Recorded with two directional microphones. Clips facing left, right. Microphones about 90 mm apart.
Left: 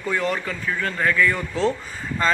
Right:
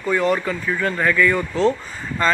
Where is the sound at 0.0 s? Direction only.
5° right (ahead or behind).